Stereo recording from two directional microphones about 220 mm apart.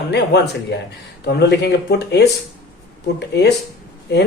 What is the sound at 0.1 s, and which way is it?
Speech, 50° left (ahead or behind).